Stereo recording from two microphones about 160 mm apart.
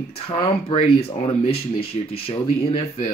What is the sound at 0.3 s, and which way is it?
Speech, 35° left (ahead or behind).